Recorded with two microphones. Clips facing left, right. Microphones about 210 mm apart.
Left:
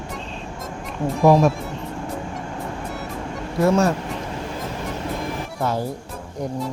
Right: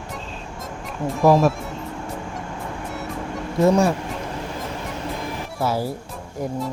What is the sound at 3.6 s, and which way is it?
Speech, 15° right (ahead or behind).